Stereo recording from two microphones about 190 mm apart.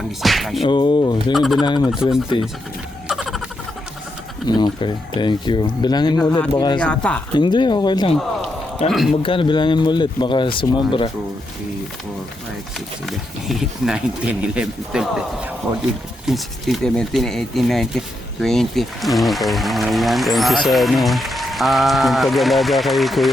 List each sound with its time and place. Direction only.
0.2 s speech: centre (ahead or behind)
0.7 s speech: 25° left (ahead or behind)
1.3 s speech: centre (ahead or behind)
1.6 s speech: 25° left (ahead or behind)
3.1 s a sound: centre (ahead or behind)
4.4 s speech: 25° left (ahead or behind)
6.7 s speech: 5° left (ahead or behind)
7.3 s speech: 25° left (ahead or behind)
8.9 s speech: centre (ahead or behind)
9.2 s speech: 25° left (ahead or behind)
13.1 s speech: centre (ahead or behind)